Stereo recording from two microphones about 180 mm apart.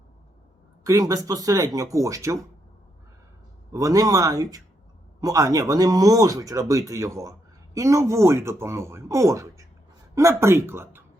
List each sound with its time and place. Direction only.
0.9 s speech: 20° right (ahead or behind)
3.7 s speech: 20° right (ahead or behind)